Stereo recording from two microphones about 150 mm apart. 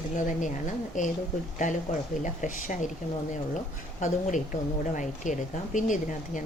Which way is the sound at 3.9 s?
55° left (ahead or behind).